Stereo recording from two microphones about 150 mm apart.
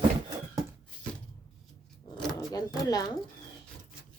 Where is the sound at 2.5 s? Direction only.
25° left (ahead or behind).